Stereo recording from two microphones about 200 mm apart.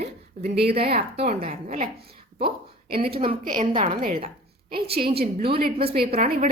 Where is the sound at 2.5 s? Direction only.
25° right (ahead or behind).